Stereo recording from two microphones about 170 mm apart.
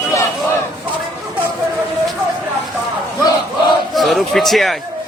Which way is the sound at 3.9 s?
Centre (ahead or behind).